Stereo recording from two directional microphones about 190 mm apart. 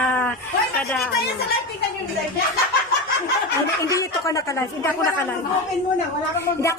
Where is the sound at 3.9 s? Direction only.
15° left (ahead or behind).